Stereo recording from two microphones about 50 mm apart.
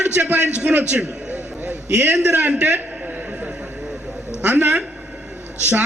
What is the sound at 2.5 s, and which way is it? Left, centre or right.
Speech, right.